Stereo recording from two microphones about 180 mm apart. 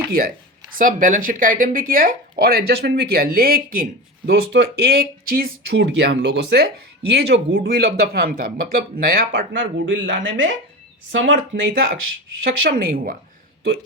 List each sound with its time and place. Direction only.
0.2 s a man's voice: 55° right (ahead or behind)
4.3 s a man's voice: 70° right (ahead or behind); by 11.7 s 90° right
12.4 s a man's voice: 55° right (ahead or behind)